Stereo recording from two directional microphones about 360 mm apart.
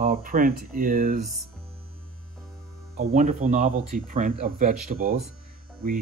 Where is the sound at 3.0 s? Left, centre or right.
Right.